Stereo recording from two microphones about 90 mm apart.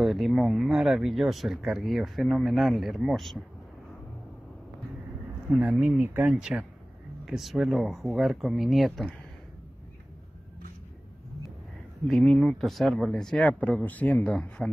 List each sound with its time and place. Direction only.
0.0 s speech: centre (ahead or behind)
5.6 s speech: 10° right (ahead or behind)
12.1 s speech: 5° left (ahead or behind)
14.3 s speech: 10° left (ahead or behind)